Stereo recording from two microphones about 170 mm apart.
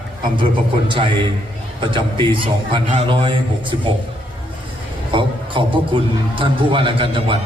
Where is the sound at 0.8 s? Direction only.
30° right (ahead or behind).